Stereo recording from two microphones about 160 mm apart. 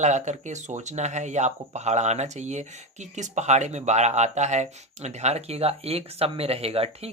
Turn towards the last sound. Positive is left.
turn(degrees=-40)  # may be behind; listen again after turning